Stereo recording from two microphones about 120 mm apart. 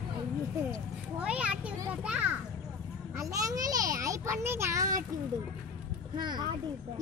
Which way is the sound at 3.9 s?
25° right (ahead or behind).